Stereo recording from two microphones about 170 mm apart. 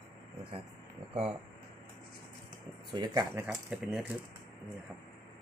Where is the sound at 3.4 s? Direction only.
5° right (ahead or behind).